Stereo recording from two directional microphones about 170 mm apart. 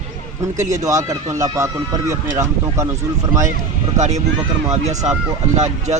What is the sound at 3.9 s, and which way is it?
A man's voice, 45° right (ahead or behind).